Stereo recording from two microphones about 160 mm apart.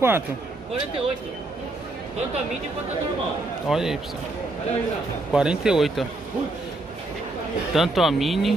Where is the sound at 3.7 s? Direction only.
5° right (ahead or behind).